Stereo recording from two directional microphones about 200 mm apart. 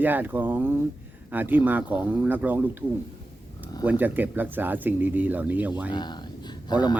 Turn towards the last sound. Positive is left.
turn(degrees=20)  # may be behind; listen again after turning